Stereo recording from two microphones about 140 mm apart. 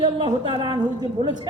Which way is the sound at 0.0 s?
35° right (ahead or behind).